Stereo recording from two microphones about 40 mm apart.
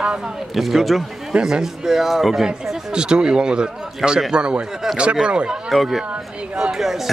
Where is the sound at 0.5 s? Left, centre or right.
Centre.